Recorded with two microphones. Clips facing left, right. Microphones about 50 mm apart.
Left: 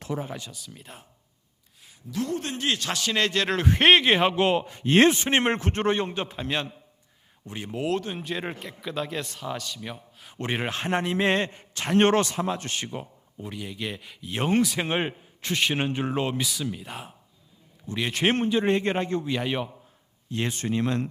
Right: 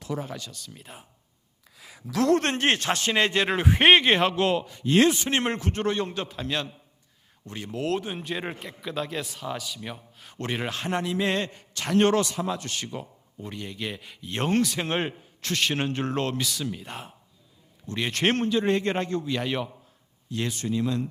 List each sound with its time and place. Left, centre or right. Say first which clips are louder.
0.1 s a man's voice: even; centre
0.5 s speech: even; centre
2.1 s speech: right 7 dB; right
3.2 s speech: even; centre
4.4 s a man's voice: left 1 dB; left
8.1 s speech: even; centre
10.3 s a man's voice: left 1 dB; left
13.4 s a man's voice: even; centre
18.4 s a man's voice: left 1 dB; left
20.3 s speech: left 1 dB; left